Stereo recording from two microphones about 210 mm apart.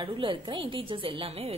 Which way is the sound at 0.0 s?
25° right (ahead or behind).